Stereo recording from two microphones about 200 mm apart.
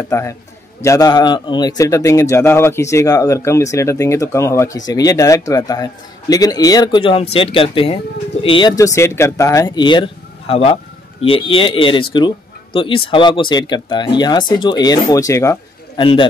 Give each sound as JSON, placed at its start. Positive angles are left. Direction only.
{"t": 0.1, "sound": "a man's voice", "side_deg": 15}